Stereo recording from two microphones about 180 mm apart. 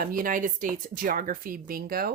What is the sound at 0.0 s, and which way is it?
Speech, 50° right (ahead or behind).